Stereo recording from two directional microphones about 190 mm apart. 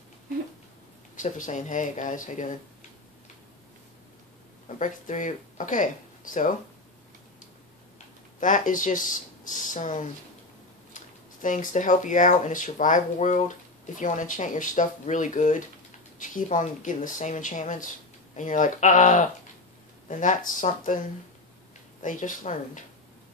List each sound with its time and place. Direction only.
1.1 s speech: 40° left (ahead or behind)
4.6 s speech: 40° left (ahead or behind)
8.4 s speech: 45° left (ahead or behind)
11.4 s speech: 45° left (ahead or behind)
22.0 s speech: 45° left (ahead or behind)